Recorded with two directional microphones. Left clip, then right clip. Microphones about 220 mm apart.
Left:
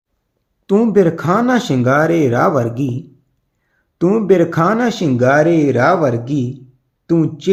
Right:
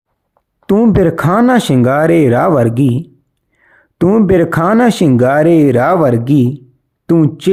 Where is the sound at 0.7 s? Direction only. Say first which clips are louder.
Right 2 dB; 35° right (ahead or behind).